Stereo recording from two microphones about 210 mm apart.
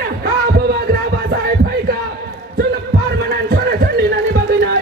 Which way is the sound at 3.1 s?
50° right (ahead or behind).